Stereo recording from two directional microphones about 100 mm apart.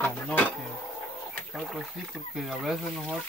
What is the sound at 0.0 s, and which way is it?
Dishes, 20° left (ahead or behind).